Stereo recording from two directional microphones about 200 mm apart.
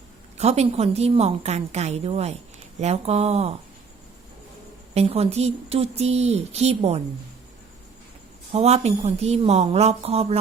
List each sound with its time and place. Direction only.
0.3 s speech: 35° right (ahead or behind)
4.9 s speech: 30° right (ahead or behind)
8.5 s speech: 30° right (ahead or behind)